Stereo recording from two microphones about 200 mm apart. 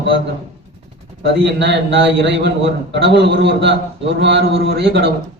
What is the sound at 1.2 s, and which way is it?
A man's voice, 60° right (ahead or behind).